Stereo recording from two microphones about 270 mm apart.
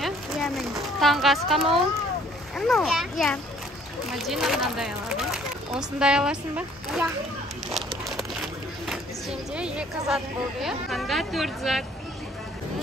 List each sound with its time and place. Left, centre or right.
0.0 s a sound: centre
2.5 s speech: centre
9.6 s speech: centre